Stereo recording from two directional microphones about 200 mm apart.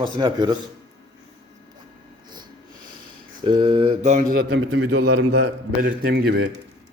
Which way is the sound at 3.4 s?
25° right (ahead or behind).